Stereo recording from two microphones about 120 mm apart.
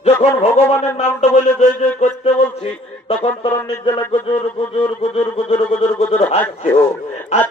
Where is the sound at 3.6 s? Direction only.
45° left (ahead or behind).